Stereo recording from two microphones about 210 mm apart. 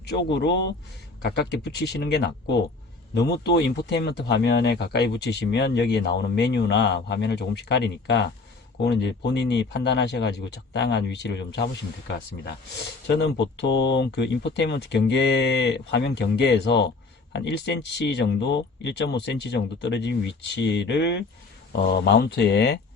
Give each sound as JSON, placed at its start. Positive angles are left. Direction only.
{"t": 0.1, "sound": "speech", "side_deg": 55}
{"t": 13.6, "sound": "speech", "side_deg": 55}